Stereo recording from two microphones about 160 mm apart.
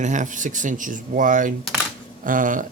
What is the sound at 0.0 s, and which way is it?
Speech, 50° right (ahead or behind).